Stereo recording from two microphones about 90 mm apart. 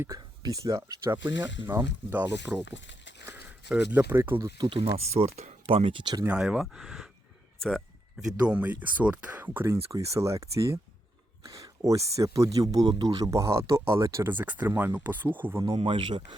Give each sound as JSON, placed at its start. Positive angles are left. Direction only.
{"t": 0.2, "sound": "speech", "side_deg": -45}
{"t": 3.2, "sound": "a sound", "side_deg": -20}
{"t": 4.2, "sound": "speech", "side_deg": -30}
{"t": 4.5, "sound": "speech", "side_deg": -65}
{"t": 5.2, "sound": "speech", "side_deg": -90}
{"t": 6.2, "sound": "speech", "side_deg": -10}
{"t": 8.4, "sound": "speech", "side_deg": -15}
{"t": 9.9, "sound": "speech", "side_deg": -35}
{"t": 13.2, "sound": "speech", "side_deg": -35}
{"t": 14.3, "sound": "speech", "side_deg": -20}
{"t": 15.8, "sound": "speech", "side_deg": -65}